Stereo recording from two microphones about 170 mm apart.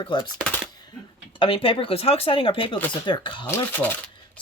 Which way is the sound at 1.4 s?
30° left (ahead or behind).